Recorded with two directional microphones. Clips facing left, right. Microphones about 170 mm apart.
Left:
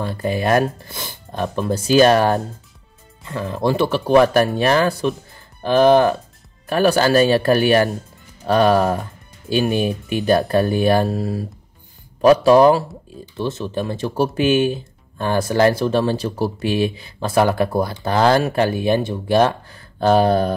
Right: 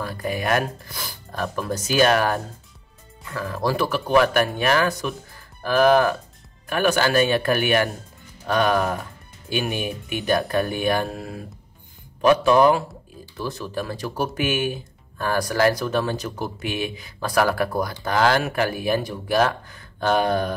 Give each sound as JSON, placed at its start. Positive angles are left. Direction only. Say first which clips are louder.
{"t": 0.0, "sound": "speech", "louder": "left 5 dB", "side_deg": 30}